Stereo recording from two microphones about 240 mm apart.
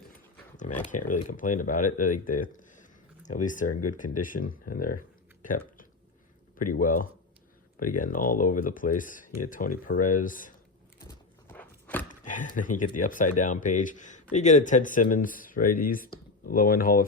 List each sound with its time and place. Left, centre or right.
0.8 s speech: left
11.0 s a sound: centre
12.2 s speech: left